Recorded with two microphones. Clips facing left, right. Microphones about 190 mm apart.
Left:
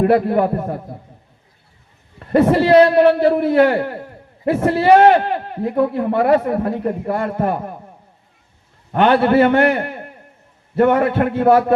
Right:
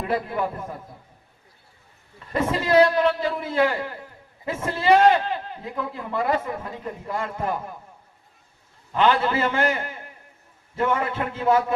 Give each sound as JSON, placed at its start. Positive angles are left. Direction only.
{"t": 0.0, "sound": "a man's voice", "side_deg": 65}
{"t": 2.1, "sound": "a man's voice", "side_deg": 65}
{"t": 8.9, "sound": "a man's voice", "side_deg": 65}